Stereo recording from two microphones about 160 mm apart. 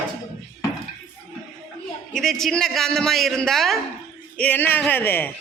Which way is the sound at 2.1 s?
Centre (ahead or behind).